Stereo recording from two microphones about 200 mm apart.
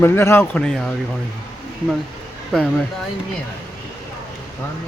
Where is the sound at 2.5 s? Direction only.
Centre (ahead or behind).